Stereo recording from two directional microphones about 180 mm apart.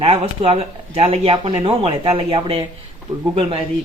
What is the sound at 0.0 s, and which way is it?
Speech, 30° right (ahead or behind).